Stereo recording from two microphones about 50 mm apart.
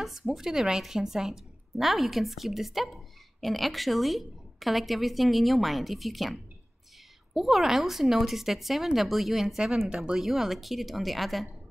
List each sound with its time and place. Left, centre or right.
0.0 s a woman's voice: centre
9.8 s speech: centre
10.2 s a woman's voice: centre